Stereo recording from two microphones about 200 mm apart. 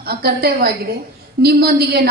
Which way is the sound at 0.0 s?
50° right (ahead or behind).